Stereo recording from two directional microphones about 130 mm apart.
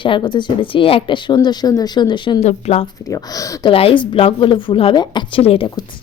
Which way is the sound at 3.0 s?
25° left (ahead or behind).